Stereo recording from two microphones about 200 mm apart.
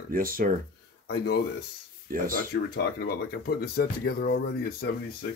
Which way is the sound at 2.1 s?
45° right (ahead or behind).